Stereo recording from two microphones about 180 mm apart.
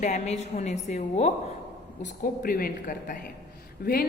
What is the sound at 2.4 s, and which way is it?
A woman's voice, 55° left (ahead or behind).